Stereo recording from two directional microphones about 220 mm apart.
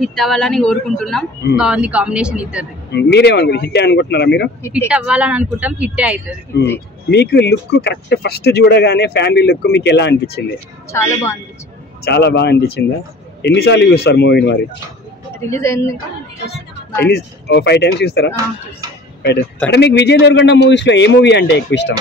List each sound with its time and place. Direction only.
0.0 s speech: centre (ahead or behind)
2.9 s speech: 50° left (ahead or behind)
4.7 s speech: 5° right (ahead or behind)
7.1 s speech: 50° left (ahead or behind)
10.9 s a woman's voice: 10° left (ahead or behind)
12.0 s speech: 50° left (ahead or behind)
15.3 s speech: 10° left (ahead or behind)
17.1 s speech: 50° left (ahead or behind)
19.7 s speech: 50° left (ahead or behind)